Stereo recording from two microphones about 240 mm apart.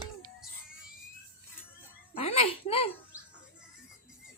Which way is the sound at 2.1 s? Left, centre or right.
Left.